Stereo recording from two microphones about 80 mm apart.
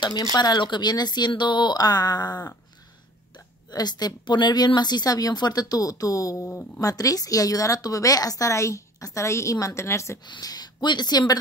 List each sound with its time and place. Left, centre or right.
0.0 s a woman's voice: left
10.4 s speech: left